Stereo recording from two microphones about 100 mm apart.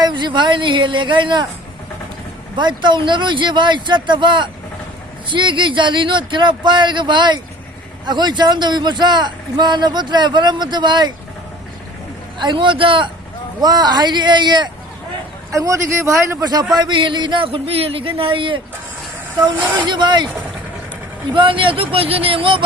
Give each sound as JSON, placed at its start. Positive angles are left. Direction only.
{"t": 0.0, "sound": "a man's voice", "side_deg": -50}
{"t": 2.6, "sound": "a man's voice", "side_deg": -50}
{"t": 12.4, "sound": "speech", "side_deg": -50}
{"t": 13.6, "sound": "a man's voice", "side_deg": -40}
{"t": 15.5, "sound": "speech", "side_deg": -30}
{"t": 16.4, "sound": "a man's voice", "side_deg": -40}
{"t": 21.3, "sound": "speech", "side_deg": -60}